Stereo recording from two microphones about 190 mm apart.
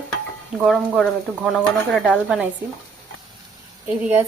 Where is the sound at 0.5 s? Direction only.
5° right (ahead or behind).